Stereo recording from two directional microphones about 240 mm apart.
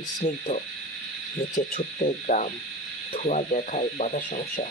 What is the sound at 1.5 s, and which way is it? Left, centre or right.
Speech, left.